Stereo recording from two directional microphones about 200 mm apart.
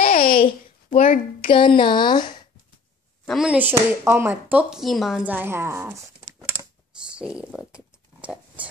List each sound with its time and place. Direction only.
0.0 s babbling: 45° left (ahead or behind)
1.4 s speech: 25° left (ahead or behind)
3.3 s speech: 5° right (ahead or behind)
7.0 s a sound: 5° right (ahead or behind)